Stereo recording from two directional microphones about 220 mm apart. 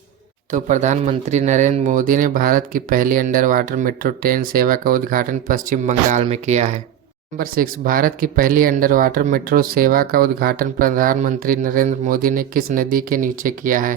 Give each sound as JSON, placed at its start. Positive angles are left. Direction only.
{"t": 0.5, "sound": "speech", "side_deg": -35}